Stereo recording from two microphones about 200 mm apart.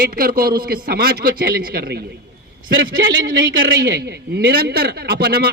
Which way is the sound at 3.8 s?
55° right (ahead or behind).